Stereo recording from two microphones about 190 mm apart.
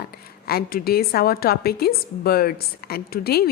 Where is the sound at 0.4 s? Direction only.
50° left (ahead or behind).